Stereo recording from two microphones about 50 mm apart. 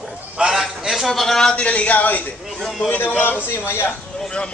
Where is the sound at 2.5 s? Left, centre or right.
Centre.